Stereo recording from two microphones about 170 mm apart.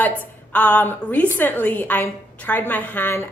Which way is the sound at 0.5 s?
10° left (ahead or behind).